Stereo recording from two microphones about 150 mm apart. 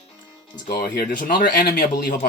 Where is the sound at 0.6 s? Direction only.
90° left.